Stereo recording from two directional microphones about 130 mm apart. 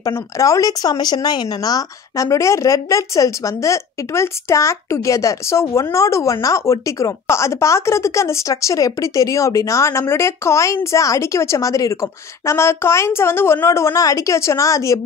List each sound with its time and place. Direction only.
0.0 s speech: 25° left (ahead or behind)